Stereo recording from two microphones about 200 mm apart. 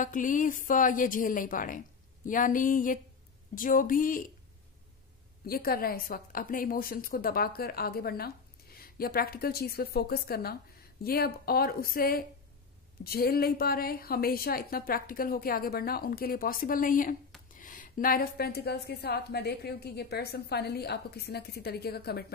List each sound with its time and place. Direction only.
0.0 s a woman's voice: 40° left (ahead or behind)
5.4 s a woman's voice: 50° left (ahead or behind)